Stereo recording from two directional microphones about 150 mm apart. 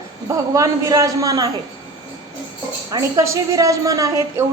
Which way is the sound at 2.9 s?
20° right (ahead or behind).